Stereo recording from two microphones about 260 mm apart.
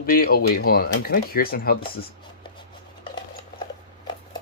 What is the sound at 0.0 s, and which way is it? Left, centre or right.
Speech, left.